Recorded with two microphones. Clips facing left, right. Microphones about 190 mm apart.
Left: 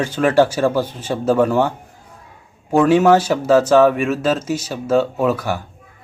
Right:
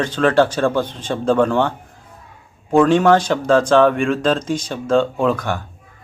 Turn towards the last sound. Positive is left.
turn(degrees=5)  # may be behind; listen again after turning